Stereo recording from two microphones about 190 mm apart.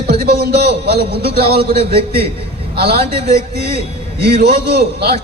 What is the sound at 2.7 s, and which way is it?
A man's voice, 55° right (ahead or behind).